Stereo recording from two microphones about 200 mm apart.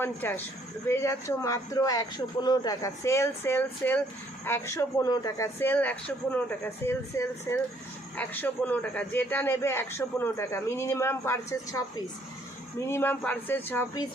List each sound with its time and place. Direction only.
0.0 s a man's voice: 10° left (ahead or behind)